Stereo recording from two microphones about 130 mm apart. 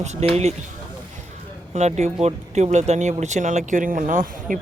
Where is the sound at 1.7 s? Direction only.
60° right (ahead or behind).